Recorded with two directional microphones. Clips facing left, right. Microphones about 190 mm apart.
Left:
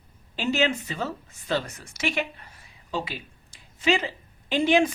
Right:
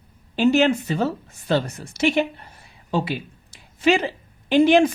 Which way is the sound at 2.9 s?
60° right (ahead or behind).